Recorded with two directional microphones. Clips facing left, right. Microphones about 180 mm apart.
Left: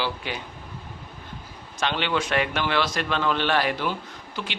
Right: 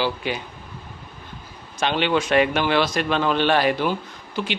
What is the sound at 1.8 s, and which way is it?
A man's voice, 15° right (ahead or behind).